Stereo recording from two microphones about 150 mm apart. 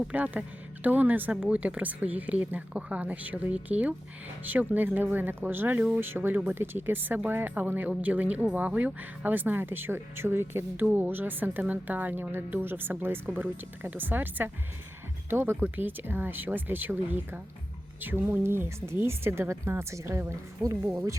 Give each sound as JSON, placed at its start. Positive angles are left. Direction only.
{"t": 0.0, "sound": "speech", "side_deg": -10}